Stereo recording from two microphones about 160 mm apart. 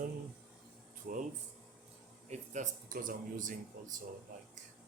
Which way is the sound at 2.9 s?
60° right (ahead or behind).